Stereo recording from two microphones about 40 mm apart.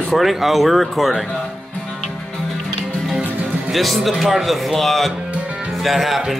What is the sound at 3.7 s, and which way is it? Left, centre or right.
Speech, centre.